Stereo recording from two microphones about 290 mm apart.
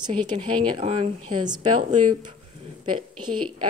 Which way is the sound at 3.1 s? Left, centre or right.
Right.